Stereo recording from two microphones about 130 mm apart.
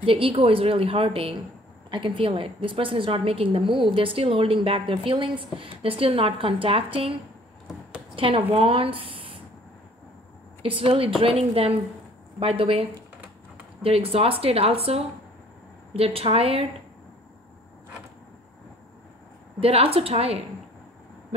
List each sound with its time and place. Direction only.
0.0 s a woman's voice: 45° right (ahead or behind)
8.2 s a woman's voice: 45° right (ahead or behind)
10.6 s a woman's voice: 45° right (ahead or behind)
13.8 s a woman's voice: 50° right (ahead or behind)
19.6 s a woman's voice: 50° right (ahead or behind)